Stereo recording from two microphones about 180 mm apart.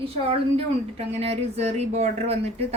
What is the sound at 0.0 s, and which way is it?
A woman's voice, 30° right (ahead or behind).